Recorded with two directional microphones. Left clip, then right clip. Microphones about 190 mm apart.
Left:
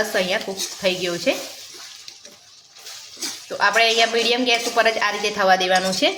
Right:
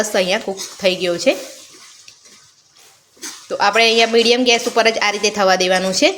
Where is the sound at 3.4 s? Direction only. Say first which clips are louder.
Right 4 dB; 45° right (ahead or behind).